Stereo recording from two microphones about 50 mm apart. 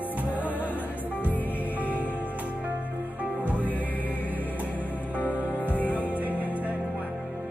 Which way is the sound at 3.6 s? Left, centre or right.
Left.